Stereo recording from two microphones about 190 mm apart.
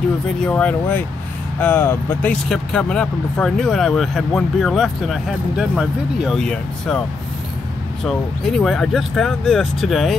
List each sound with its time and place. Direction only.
0.4 s speech: 5° left (ahead or behind)
8.0 s speech: centre (ahead or behind)